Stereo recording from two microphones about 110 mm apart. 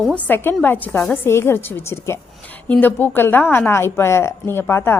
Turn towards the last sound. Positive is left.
turn(degrees=20)  # may be behind; listen again after turning